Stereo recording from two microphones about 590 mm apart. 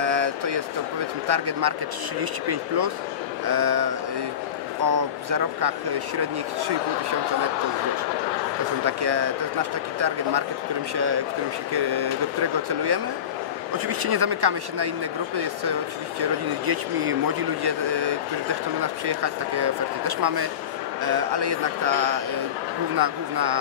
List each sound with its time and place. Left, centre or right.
0.0 s a sound: right
1.2 s speech: right
3.4 s speech: right
8.8 s speech: right
11.7 s speech: right
16.2 s speech: right